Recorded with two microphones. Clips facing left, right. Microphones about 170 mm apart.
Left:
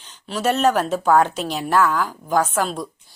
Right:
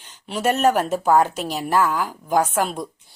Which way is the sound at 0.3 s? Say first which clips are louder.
Even; 10° right (ahead or behind).